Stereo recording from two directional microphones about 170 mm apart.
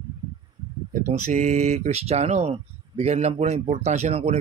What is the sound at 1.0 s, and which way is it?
A man's voice, 45° right (ahead or behind).